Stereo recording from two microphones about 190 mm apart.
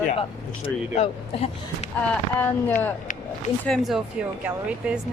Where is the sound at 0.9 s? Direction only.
35° left (ahead or behind).